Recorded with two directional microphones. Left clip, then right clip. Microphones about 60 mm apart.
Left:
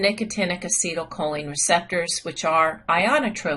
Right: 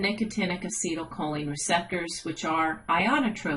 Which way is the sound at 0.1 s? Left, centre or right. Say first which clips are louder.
Left 5 dB; left.